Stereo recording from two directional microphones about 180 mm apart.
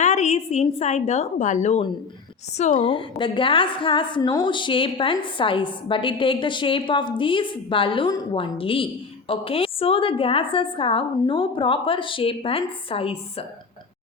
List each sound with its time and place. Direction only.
0.0 s a woman's voice: 40° left (ahead or behind)
2.7 s a woman's voice: 30° left (ahead or behind)